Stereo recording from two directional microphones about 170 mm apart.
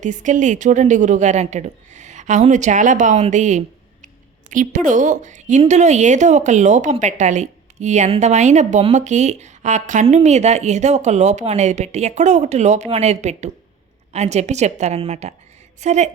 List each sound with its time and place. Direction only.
0.0 s a woman's voice: 45° right (ahead or behind)